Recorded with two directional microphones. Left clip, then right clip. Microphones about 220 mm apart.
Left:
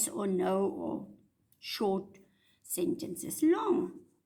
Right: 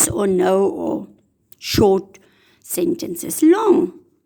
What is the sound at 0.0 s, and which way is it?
A woman's voice, 45° right (ahead or behind).